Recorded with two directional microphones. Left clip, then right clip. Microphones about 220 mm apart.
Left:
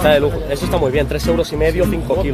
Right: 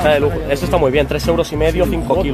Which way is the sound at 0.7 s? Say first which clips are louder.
Right 3 dB; 15° right (ahead or behind).